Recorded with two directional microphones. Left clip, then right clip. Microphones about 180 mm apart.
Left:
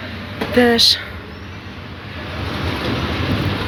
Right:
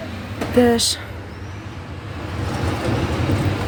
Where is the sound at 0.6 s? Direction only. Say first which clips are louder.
Left 4 dB; 15° right (ahead or behind).